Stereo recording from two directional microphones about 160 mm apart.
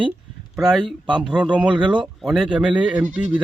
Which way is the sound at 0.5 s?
5° right (ahead or behind).